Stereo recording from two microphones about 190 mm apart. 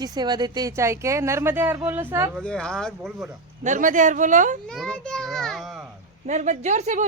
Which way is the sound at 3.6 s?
40° right (ahead or behind).